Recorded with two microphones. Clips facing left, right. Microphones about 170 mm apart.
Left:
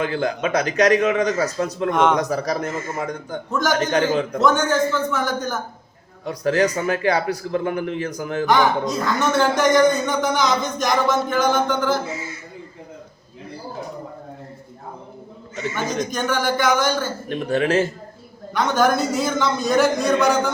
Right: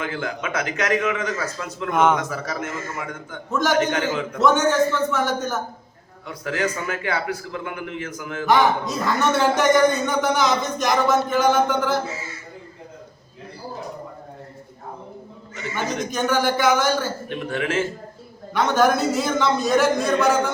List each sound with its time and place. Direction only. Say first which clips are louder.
0.0 s a man's voice: left 6 dB; 35° left (ahead or behind)
1.9 s a man's voice: even; 5° right (ahead or behind)
2.1 s a man's voice: left 5 dB; 40° left (ahead or behind)
3.5 s a man's voice: even; centre (ahead or behind)
3.8 s a man's voice: left 2 dB; 35° left (ahead or behind)
4.4 s a man's voice: right 2 dB; centre (ahead or behind)
6.2 s a man's voice: left 6 dB; 40° left (ahead or behind)
8.4 s a man's voice: even; centre (ahead or behind)
15.7 s a man's voice: even; centre (ahead or behind)
17.2 s a man's voice: left 5 dB; 35° left (ahead or behind)
18.5 s a man's voice: even; centre (ahead or behind)